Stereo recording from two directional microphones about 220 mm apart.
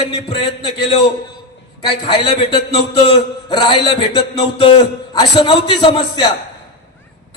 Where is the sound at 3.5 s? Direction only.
20° left (ahead or behind).